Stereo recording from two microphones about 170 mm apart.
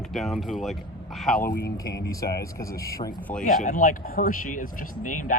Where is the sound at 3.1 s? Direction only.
5° left (ahead or behind).